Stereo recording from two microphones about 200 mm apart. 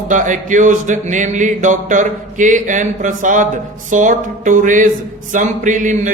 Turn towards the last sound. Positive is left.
turn(degrees=-40)  # may be behind; listen again after turning